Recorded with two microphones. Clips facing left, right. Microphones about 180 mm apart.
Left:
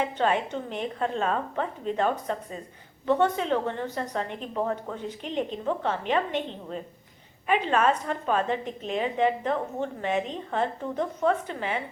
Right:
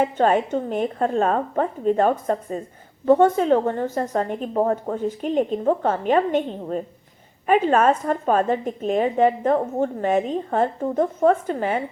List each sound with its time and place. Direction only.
0.0 s a woman's voice: 45° right (ahead or behind)